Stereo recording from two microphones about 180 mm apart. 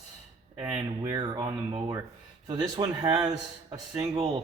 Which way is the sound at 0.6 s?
20° right (ahead or behind).